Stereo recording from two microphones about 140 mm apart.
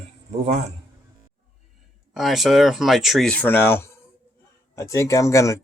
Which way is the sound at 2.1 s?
Centre (ahead or behind).